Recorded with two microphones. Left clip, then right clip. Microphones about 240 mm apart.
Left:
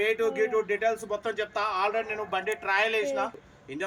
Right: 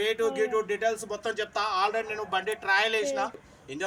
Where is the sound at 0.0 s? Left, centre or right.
Centre.